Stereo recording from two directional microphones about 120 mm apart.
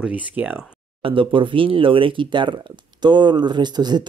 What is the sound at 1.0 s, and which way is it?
Speech, 45° right (ahead or behind).